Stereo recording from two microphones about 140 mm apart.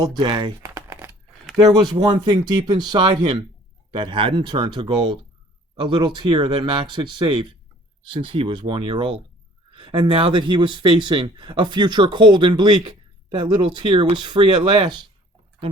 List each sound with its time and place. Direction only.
0.0 s speech: 30° right (ahead or behind)
0.6 s crumpling: 20° right (ahead or behind)
1.7 s speech: 30° right (ahead or behind)